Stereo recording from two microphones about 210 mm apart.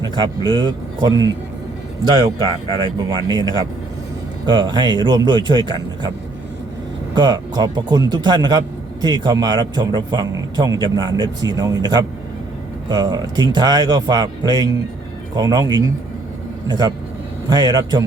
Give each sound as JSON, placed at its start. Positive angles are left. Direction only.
{"t": 0.0, "sound": "a man's voice", "side_deg": -20}
{"t": 7.2, "sound": "a man's voice", "side_deg": -20}